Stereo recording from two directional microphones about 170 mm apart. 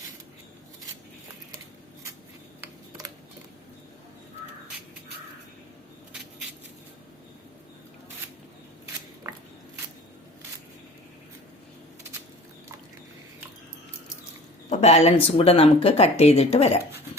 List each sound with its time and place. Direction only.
14.7 s speech: 40° left (ahead or behind)